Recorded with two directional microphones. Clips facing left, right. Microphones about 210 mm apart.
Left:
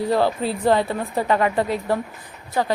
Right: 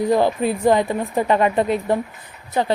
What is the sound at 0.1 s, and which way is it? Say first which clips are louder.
A woman's voice: right 2 dB; 15° right (ahead or behind).